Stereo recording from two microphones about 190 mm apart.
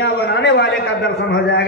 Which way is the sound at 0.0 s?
60° left (ahead or behind).